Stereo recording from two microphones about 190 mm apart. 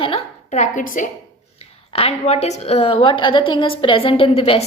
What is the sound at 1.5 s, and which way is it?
A woman's voice, 30° left (ahead or behind).